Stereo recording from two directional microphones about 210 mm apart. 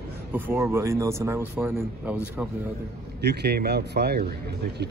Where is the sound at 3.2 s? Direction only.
50° right (ahead or behind).